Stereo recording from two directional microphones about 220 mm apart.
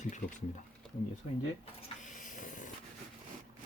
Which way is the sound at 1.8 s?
35° left (ahead or behind).